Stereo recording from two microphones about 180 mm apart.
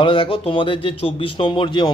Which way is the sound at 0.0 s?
30° left (ahead or behind).